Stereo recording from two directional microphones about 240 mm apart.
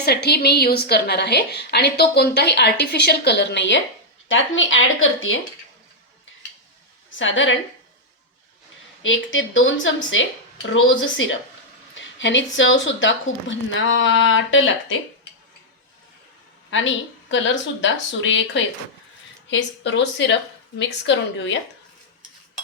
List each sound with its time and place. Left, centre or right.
0.0 s a woman's voice: left
7.2 s a woman's voice: left
9.0 s a woman's voice: left
17.3 s a woman's voice: left
21.3 s a woman's voice: left